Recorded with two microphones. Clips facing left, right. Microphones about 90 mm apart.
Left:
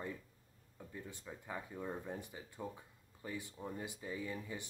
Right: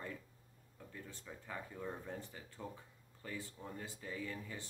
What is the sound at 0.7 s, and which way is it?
Speech, 15° left (ahead or behind).